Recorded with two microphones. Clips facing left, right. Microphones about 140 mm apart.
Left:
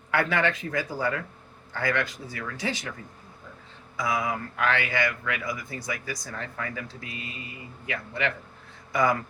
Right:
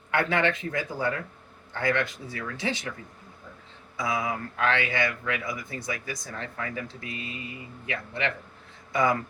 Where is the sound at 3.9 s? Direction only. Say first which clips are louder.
Left 1 dB; 25° right (ahead or behind).